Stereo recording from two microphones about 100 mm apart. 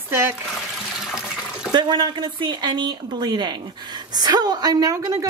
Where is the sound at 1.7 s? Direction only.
50° right (ahead or behind).